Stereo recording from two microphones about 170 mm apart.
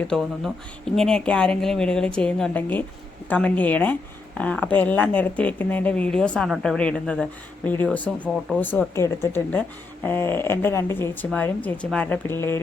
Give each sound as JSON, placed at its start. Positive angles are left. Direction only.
{"t": 0.1, "sound": "speech", "side_deg": 0}